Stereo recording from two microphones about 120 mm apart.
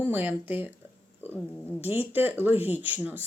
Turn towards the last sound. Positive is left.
turn(degrees=-15)  # may be behind; listen again after turning